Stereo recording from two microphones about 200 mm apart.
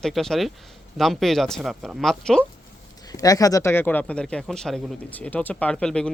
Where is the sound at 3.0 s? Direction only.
20° left (ahead or behind).